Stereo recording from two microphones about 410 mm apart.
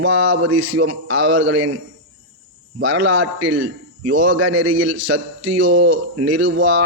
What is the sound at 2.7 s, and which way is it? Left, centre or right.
A man's voice, right.